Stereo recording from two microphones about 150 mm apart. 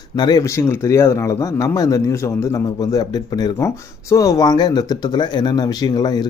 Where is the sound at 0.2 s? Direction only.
25° left (ahead or behind).